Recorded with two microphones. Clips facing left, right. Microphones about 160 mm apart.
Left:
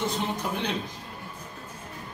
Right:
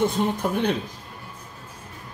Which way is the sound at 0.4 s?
50° right (ahead or behind).